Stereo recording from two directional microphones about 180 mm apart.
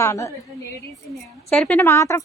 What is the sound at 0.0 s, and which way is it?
Speech, 15° left (ahead or behind).